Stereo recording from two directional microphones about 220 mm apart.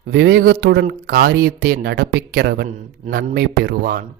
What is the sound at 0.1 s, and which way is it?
Speech, 45° right (ahead or behind).